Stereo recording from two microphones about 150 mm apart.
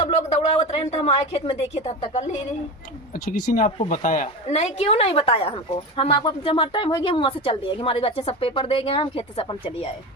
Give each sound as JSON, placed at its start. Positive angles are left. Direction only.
{"t": 0.0, "sound": "a woman's voice", "side_deg": 45}
{"t": 3.8, "sound": "a woman's voice", "side_deg": 55}